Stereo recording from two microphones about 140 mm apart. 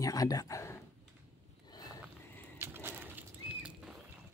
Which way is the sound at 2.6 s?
15° right (ahead or behind).